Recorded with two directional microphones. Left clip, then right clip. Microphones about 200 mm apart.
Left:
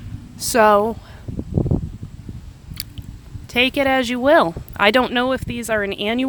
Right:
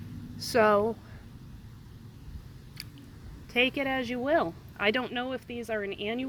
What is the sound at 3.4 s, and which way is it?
Speech, 30° left (ahead or behind).